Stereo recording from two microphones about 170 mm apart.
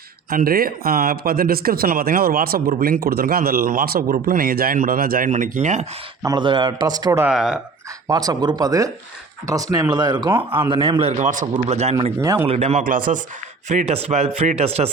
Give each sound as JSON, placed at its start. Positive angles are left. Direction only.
{"t": 0.3, "sound": "speech", "side_deg": -60}
{"t": 6.2, "sound": "a man's voice", "side_deg": -25}
{"t": 7.3, "sound": "speech", "side_deg": 0}
{"t": 8.0, "sound": "a man's voice", "side_deg": -20}
{"t": 9.9, "sound": "a man's voice", "side_deg": -25}
{"t": 11.2, "sound": "speech", "side_deg": -50}
{"t": 11.5, "sound": "speech", "side_deg": -40}
{"t": 12.2, "sound": "a man's voice", "side_deg": -20}
{"t": 12.5, "sound": "speech", "side_deg": -40}